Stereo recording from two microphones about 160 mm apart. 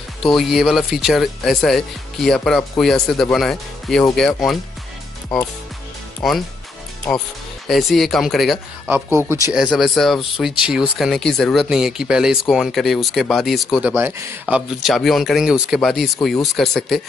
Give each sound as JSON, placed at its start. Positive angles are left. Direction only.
{"t": 0.2, "sound": "speech", "side_deg": 0}
{"t": 7.6, "sound": "speech", "side_deg": 0}